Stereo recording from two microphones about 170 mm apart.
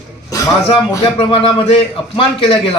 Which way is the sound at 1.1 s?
30° left (ahead or behind).